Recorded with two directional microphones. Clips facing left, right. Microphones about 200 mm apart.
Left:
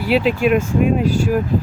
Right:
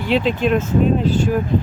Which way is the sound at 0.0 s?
5° left (ahead or behind).